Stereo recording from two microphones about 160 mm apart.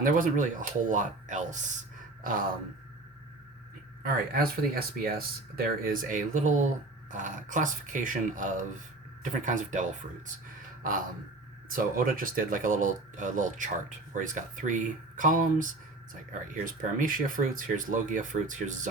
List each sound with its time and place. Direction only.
0.0 s speech: 55° right (ahead or behind)
4.0 s speech: 65° right (ahead or behind); by 9.9 s 50° right (ahead or behind)
11.7 s speech: 60° right (ahead or behind)